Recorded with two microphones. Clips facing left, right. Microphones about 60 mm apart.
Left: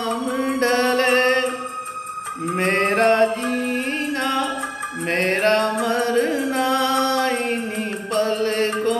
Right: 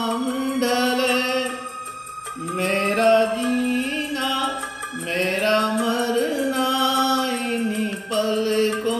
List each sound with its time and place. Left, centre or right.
0.0 s music: left